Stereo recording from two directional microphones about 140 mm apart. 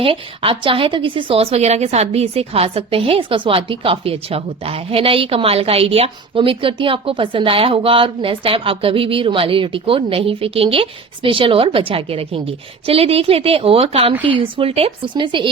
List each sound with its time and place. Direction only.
0.0 s a woman's voice: 40° right (ahead or behind)